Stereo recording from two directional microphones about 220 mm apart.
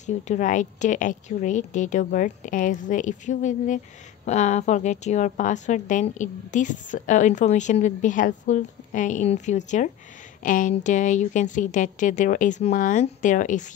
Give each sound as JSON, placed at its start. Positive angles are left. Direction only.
{"t": 0.0, "sound": "a woman's voice", "side_deg": 35}